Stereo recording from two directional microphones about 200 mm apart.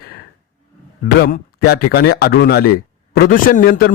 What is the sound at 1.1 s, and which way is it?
Speech, 50° left (ahead or behind).